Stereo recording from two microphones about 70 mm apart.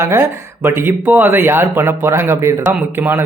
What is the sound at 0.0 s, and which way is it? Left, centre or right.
Speech, right.